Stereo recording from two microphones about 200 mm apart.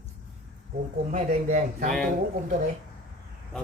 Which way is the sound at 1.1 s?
35° right (ahead or behind).